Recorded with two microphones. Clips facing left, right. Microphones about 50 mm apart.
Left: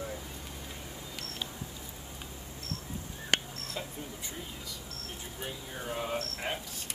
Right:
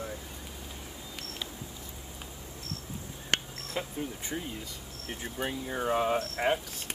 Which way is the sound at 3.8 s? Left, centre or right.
Right.